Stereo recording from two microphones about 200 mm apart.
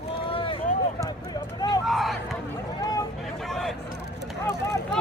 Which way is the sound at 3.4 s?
Centre (ahead or behind).